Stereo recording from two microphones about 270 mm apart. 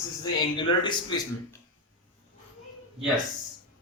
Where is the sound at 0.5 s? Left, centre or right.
Centre.